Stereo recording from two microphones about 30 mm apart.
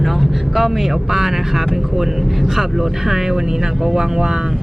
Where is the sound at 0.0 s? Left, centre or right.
Centre.